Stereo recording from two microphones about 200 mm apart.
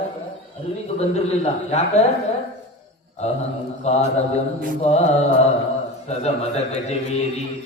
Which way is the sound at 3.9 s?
35° left (ahead or behind).